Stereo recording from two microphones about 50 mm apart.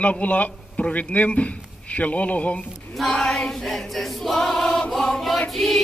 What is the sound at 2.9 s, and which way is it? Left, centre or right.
Choir, centre.